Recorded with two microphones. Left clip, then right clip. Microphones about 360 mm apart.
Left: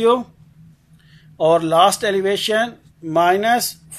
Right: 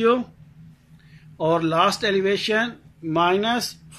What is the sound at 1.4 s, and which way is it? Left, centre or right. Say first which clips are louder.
Speech: left 6 dB; left.